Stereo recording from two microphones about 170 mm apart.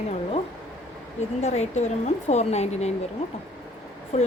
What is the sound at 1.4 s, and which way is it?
A woman's voice, 40° left (ahead or behind).